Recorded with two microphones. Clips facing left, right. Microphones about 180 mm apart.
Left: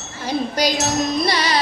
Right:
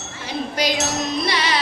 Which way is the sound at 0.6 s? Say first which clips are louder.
Left 1 dB; 40° left (ahead or behind).